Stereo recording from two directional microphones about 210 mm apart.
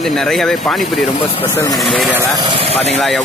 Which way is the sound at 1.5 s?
15° left (ahead or behind).